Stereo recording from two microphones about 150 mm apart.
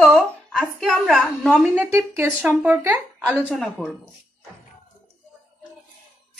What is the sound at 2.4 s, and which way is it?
A woman's voice, 5° right (ahead or behind).